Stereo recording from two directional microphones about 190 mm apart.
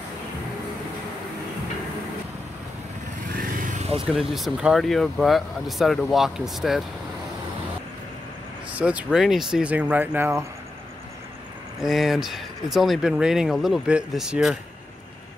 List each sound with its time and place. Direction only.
3.3 s vehicle: 45° right (ahead or behind)
4.1 s speech: centre (ahead or behind)
8.7 s speech: 5° right (ahead or behind)
11.8 s speech: centre (ahead or behind)